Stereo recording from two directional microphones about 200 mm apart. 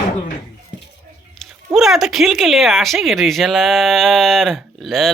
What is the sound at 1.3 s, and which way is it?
Speech, centre (ahead or behind).